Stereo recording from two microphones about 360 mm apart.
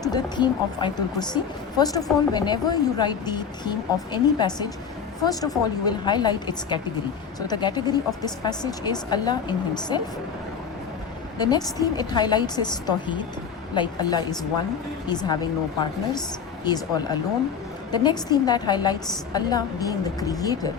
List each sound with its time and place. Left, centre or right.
0.0 s a woman's voice: centre
11.3 s a woman's voice: centre